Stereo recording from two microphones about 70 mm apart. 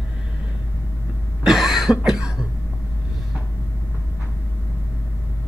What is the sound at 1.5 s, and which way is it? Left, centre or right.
Cough, centre.